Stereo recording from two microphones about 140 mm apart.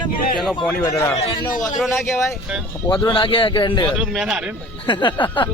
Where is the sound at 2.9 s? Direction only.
35° left (ahead or behind).